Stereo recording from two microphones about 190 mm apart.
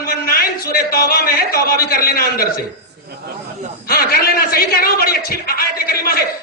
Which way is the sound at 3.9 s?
50° left (ahead or behind).